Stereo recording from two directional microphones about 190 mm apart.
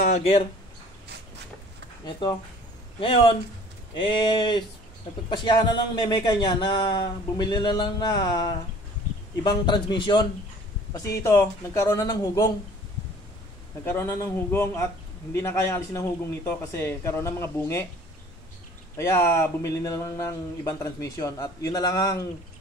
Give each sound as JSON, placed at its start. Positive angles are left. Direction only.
{"t": 0.2, "sound": "speech", "side_deg": 30}
{"t": 2.0, "sound": "a man's voice", "side_deg": 25}
{"t": 13.8, "sound": "a man's voice", "side_deg": 15}
{"t": 18.9, "sound": "a man's voice", "side_deg": 15}